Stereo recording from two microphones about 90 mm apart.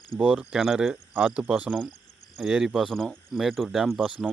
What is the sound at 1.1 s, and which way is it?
Speech, 20° right (ahead or behind).